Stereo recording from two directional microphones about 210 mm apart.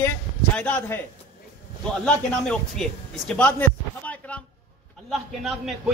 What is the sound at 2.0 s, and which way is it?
A man's voice, 5° left (ahead or behind).